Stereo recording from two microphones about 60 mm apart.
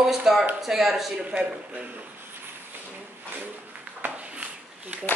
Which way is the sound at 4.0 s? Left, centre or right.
Right.